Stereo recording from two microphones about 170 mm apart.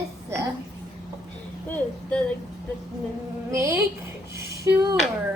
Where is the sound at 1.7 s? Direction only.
10° left (ahead or behind).